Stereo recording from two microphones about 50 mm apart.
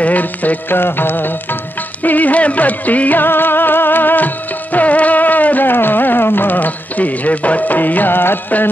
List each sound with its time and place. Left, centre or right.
0.0 s music: left
4.7 s music: left